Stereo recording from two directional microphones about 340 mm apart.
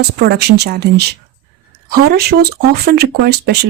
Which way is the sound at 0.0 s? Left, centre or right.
Right.